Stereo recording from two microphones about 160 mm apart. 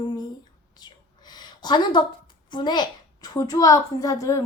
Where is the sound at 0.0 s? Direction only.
25° left (ahead or behind).